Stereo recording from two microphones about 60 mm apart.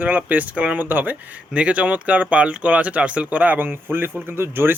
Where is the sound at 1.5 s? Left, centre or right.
Right.